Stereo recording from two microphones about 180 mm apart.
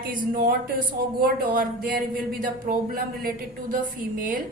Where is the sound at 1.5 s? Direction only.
55° right (ahead or behind).